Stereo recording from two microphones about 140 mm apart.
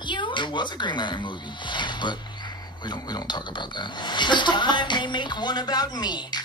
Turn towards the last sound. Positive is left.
turn(degrees=30)  # may be behind; listen again after turning